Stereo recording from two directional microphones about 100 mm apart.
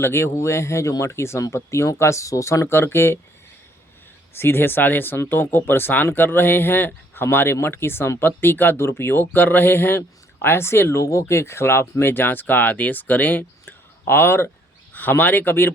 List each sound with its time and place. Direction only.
0.0 s speech: 25° left (ahead or behind)
4.4 s speech: 25° left (ahead or behind)